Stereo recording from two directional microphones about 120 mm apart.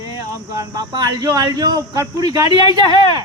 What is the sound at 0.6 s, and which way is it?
Speech, 30° right (ahead or behind).